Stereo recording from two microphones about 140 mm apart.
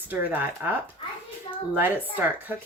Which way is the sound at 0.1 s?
10° right (ahead or behind).